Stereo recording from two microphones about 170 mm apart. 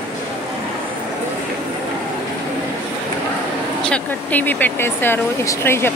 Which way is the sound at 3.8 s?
10° left (ahead or behind).